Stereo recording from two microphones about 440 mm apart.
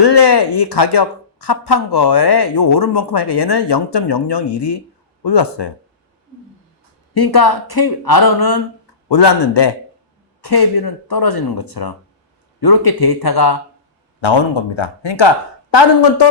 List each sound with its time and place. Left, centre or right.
0.0 s speech: left
7.1 s speech: left
9.0 s a man's voice: left
14.2 s speech: left
15.7 s speech: left